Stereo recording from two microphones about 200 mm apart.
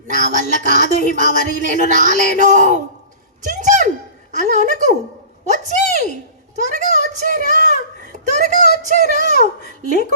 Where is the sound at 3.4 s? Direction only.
40° right (ahead or behind).